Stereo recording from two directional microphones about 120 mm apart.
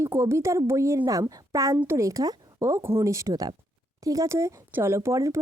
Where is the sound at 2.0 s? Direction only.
30° right (ahead or behind).